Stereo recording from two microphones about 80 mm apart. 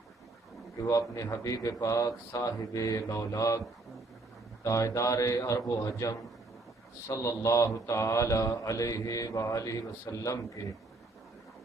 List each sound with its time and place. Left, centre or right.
0.8 s a man's voice: left
1.5 s mantra: left
4.6 s a man's voice: left
7.1 s mantra: left